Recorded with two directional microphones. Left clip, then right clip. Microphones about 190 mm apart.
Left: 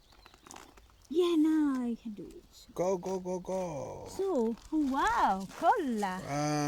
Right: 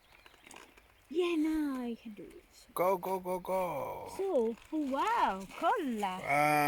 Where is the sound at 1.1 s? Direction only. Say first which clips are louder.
Left 4 dB; 25° left (ahead or behind).